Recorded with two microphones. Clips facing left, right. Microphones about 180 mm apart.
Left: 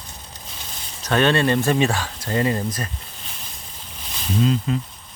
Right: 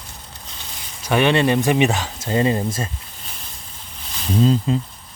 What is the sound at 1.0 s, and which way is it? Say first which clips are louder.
Speech: right 2 dB; 10° right (ahead or behind).